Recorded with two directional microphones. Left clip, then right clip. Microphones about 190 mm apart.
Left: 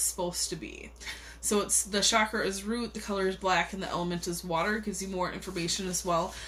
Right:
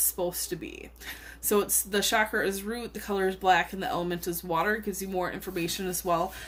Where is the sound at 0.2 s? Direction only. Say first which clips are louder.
Right 4 dB; 50° right (ahead or behind).